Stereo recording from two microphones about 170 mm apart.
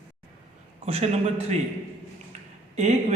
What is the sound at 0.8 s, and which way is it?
Speech, 35° right (ahead or behind).